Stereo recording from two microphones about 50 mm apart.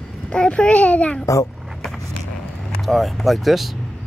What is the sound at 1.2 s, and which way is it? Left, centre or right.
Speech, left.